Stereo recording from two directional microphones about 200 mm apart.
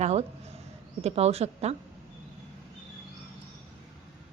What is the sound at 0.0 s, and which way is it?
Speech, 30° right (ahead or behind).